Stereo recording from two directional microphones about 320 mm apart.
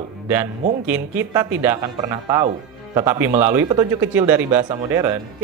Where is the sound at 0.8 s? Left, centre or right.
Centre.